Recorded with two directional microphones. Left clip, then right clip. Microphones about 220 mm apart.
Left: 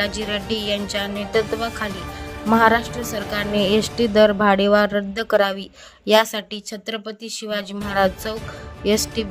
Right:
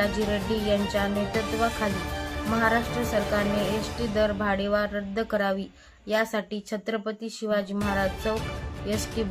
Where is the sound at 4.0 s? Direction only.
50° left (ahead or behind).